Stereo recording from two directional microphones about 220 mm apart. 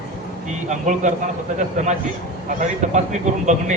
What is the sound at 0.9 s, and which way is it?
Speech, 35° right (ahead or behind).